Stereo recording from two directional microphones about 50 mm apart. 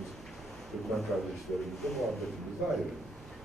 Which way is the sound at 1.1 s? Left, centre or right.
Centre.